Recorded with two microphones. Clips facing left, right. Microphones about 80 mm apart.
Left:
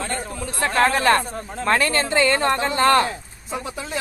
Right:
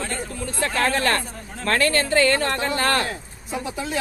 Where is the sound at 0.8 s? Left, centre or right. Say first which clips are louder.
Left 4 dB; left.